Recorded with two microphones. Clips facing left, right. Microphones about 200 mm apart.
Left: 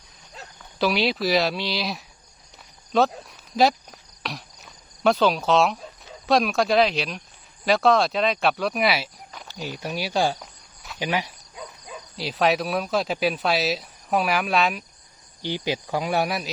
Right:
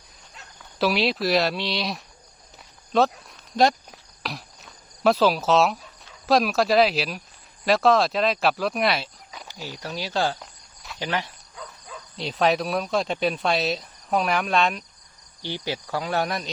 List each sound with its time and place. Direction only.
0.8 s speech: centre (ahead or behind)
3.5 s cricket: centre (ahead or behind)
6.2 s speech: centre (ahead or behind)
9.6 s cricket: 15° left (ahead or behind)
11.0 s speech: 10° left (ahead or behind)
15.4 s cricket: 15° left (ahead or behind)